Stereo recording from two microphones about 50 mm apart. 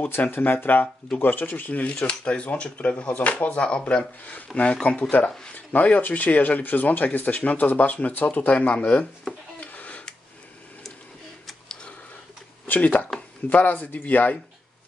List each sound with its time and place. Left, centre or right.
0.0 s speech: left
2.0 s speech: centre
4.2 s speech: left
9.6 s a sound: left
12.6 s a sound: left
13.5 s speech: left